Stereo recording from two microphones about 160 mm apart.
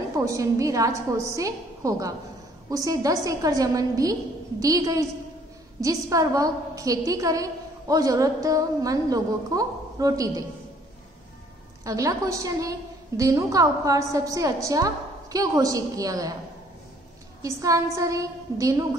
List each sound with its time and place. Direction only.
0.1 s a woman's voice: 20° right (ahead or behind)
11.8 s a woman's voice: 20° right (ahead or behind)
17.4 s a woman's voice: 20° right (ahead or behind)